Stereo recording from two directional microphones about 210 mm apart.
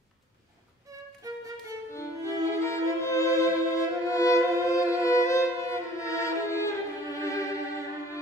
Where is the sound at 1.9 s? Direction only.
15° left (ahead or behind).